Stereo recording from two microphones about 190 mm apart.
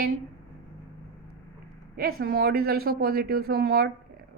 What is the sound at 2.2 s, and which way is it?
A woman's voice, 55° right (ahead or behind).